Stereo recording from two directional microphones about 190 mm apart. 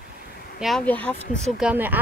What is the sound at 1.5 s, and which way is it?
Speech, 5° right (ahead or behind).